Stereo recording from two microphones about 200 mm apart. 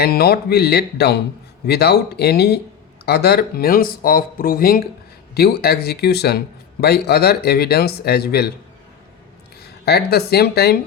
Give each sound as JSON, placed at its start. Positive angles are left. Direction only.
{"t": 0.0, "sound": "speech", "side_deg": 50}
{"t": 9.6, "sound": "speech", "side_deg": 55}